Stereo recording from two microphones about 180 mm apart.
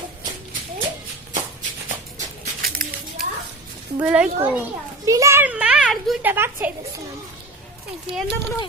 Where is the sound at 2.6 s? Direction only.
55° right (ahead or behind).